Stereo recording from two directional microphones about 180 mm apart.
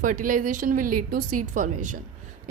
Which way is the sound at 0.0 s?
45° right (ahead or behind).